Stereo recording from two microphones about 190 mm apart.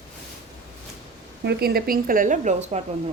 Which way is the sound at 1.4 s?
60° right (ahead or behind).